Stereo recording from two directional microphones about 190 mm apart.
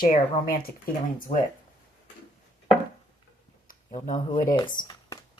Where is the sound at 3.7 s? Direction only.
40° left (ahead or behind).